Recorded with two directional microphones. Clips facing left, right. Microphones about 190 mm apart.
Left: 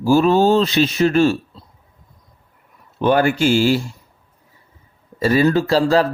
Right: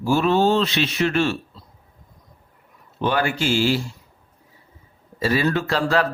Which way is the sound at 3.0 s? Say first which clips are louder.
Left 6 dB; 45° left (ahead or behind).